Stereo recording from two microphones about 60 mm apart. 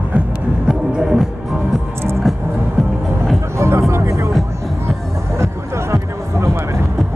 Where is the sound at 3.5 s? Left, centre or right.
Right.